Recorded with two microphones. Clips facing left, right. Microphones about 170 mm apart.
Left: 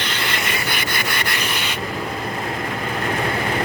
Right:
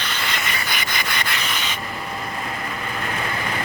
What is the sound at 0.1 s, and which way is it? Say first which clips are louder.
Rub: left 3 dB; 60° left (ahead or behind).